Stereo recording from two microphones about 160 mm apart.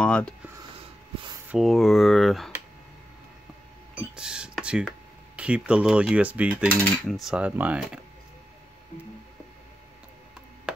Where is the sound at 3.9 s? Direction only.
5° right (ahead or behind).